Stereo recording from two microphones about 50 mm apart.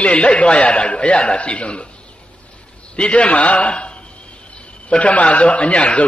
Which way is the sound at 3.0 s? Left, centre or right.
Left.